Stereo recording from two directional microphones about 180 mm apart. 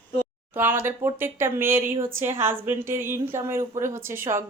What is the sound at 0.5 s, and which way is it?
Speech, 10° right (ahead or behind).